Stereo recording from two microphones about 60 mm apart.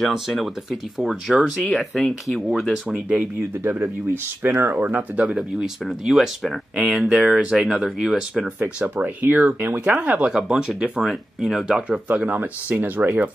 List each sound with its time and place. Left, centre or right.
0.0 s speech: centre
2.7 s speech: centre
3.2 s speech: right
5.2 s speech: centre
5.9 s speech: centre
8.5 s speech: right
10.3 s speech: centre; by 13.3 s right